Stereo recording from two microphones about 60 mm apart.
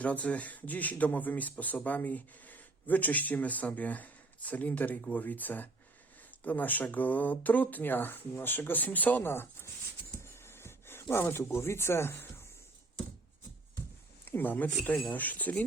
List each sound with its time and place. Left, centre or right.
0.0 s speech: left
9.3 s speech: left
10.2 s a sound: left
11.5 s speech: left
14.3 s speech: left